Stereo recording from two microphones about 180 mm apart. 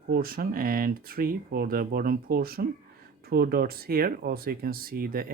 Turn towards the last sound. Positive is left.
turn(degrees=-55)  # may be behind; listen again after turning